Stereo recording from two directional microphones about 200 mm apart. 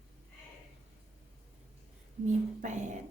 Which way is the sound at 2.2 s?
35° right (ahead or behind).